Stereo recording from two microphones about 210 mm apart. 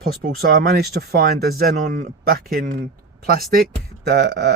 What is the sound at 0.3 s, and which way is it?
Speech, 45° right (ahead or behind).